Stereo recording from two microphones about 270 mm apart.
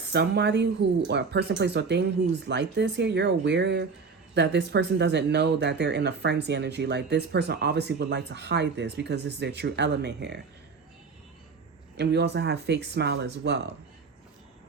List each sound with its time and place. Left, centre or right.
0.1 s speech: right
11.9 s speech: right